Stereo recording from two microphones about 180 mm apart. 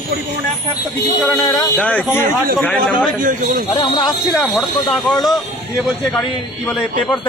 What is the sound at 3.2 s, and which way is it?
Speech, 50° right (ahead or behind).